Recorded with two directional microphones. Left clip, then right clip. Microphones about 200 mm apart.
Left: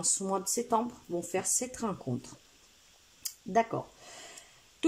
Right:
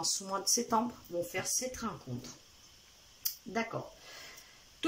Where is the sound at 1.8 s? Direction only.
35° left (ahead or behind).